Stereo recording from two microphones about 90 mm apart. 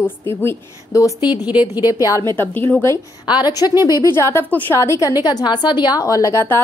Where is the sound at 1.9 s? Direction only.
40° left (ahead or behind).